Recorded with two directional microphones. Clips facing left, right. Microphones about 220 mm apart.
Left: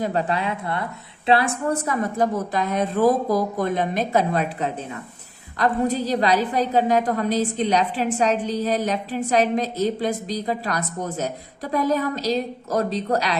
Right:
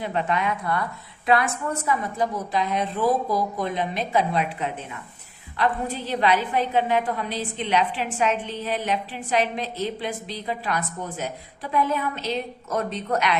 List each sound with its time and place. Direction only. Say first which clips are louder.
0.0 s a woman's voice: left 2 dB; 40° left (ahead or behind)